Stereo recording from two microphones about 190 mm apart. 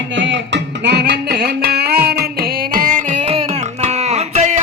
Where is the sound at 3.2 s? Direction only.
35° right (ahead or behind).